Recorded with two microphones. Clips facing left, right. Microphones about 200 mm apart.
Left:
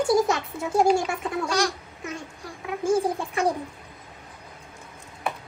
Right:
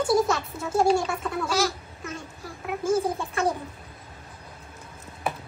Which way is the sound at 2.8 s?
15° left (ahead or behind).